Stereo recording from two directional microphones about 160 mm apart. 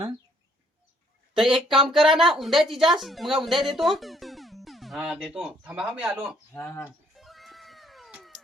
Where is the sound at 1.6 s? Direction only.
30° right (ahead or behind).